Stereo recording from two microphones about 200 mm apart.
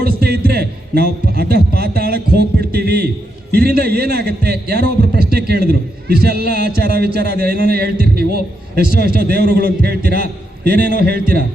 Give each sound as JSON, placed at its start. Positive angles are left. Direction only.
{"t": 0.0, "sound": "a man's voice", "side_deg": -50}